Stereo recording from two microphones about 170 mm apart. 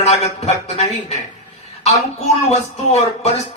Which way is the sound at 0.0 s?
40° left (ahead or behind).